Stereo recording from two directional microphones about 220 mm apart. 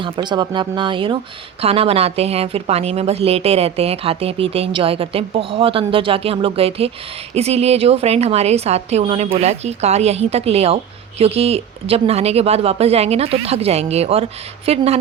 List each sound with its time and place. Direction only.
0.0 s a woman's voice: 20° right (ahead or behind)